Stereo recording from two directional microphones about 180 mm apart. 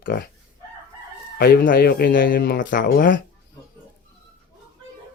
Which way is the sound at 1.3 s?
55° left (ahead or behind).